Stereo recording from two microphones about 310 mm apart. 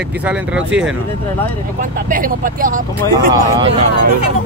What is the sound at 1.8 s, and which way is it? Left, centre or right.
Speech, right.